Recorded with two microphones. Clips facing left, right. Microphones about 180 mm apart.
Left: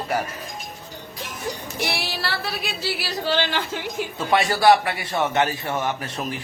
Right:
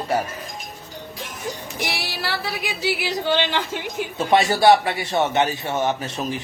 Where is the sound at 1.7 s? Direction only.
15° right (ahead or behind).